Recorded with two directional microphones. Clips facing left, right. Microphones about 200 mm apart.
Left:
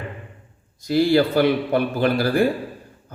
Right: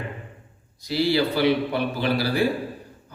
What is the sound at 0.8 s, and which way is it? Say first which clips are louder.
A man's voice: left 5 dB; 50° left (ahead or behind).